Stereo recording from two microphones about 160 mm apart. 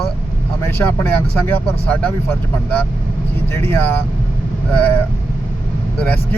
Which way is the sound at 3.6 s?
15° left (ahead or behind).